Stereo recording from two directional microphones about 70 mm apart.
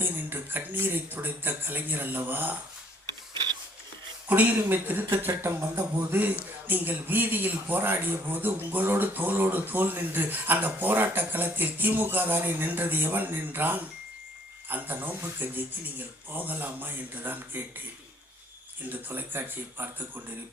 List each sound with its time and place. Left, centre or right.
0.0 s speech: right
4.3 s speech: right
19.0 s speech: right